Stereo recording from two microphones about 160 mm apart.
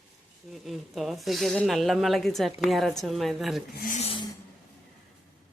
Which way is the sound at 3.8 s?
50° left (ahead or behind).